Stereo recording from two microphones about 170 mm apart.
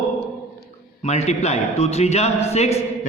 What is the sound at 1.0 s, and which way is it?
A man's voice, 40° left (ahead or behind).